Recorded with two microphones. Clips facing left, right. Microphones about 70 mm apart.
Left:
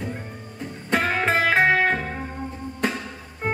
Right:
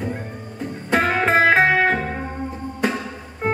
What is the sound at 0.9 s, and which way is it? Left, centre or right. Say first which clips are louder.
Music: right 4 dB; centre.